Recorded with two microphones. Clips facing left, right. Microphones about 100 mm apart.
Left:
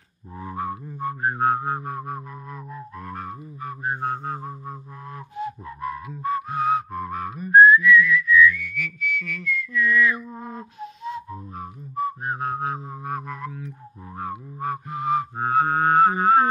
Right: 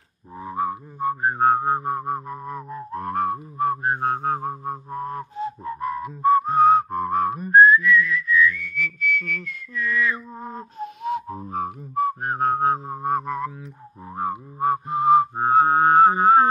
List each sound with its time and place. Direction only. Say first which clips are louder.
0.4 s music: right 4 dB; 20° right (ahead or behind)
2.9 s music: right 13 dB; 50° right (ahead or behind)
4.9 s whistling: right 5 dB; 35° right (ahead or behind)
11.1 s whistling: right 6 dB; 65° right (ahead or behind); by 13.7 s 30° right (ahead or behind)
14.1 s music: right 5 dB; 30° right (ahead or behind)